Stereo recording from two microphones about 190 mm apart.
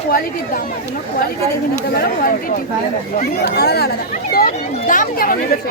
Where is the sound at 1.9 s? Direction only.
55° left (ahead or behind).